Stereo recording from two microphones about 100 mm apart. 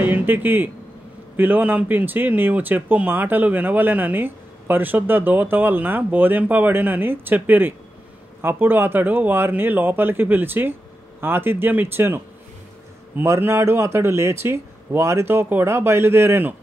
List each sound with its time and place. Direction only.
0.0 s speech: 20° right (ahead or behind)